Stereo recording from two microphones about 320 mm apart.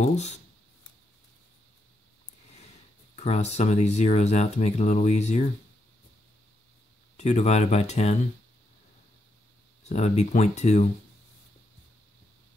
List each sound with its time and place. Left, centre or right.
0.0 s speech: left
3.2 s speech: left
7.2 s speech: left
9.8 s speech: left